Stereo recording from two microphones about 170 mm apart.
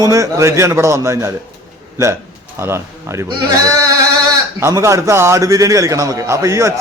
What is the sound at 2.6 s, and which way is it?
A man's voice, 15° right (ahead or behind).